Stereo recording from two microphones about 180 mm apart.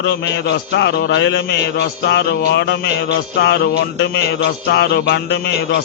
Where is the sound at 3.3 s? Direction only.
65° left (ahead or behind).